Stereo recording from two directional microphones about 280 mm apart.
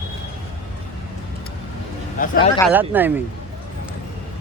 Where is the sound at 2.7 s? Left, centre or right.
Centre.